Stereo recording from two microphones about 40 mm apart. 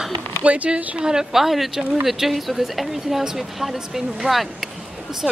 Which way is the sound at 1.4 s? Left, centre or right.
Centre.